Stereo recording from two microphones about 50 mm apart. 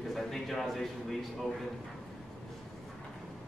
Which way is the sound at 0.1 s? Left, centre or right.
Centre.